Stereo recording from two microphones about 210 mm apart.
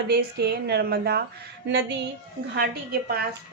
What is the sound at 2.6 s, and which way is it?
Speech, 50° right (ahead or behind).